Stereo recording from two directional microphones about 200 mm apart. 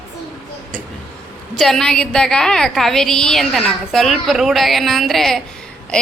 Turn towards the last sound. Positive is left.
turn(degrees=5)  # may be behind; listen again after turning